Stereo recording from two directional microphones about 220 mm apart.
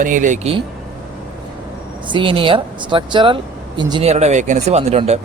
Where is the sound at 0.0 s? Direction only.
35° right (ahead or behind).